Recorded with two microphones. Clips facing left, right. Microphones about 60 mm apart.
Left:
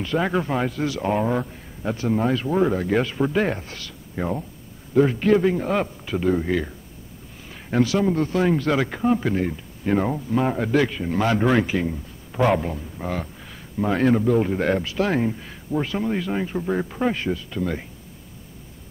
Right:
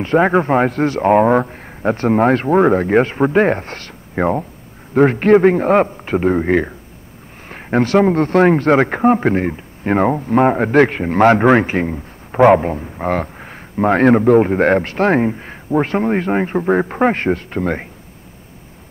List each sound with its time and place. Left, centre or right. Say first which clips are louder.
0.0 s speech: right 9 dB; right